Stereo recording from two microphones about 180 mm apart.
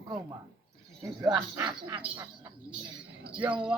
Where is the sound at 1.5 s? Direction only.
20° right (ahead or behind).